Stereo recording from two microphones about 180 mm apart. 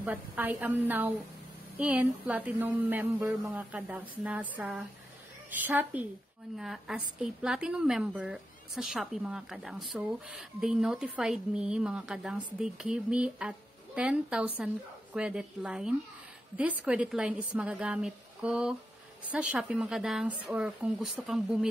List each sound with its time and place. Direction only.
0.0 s a woman's voice: 10° right (ahead or behind)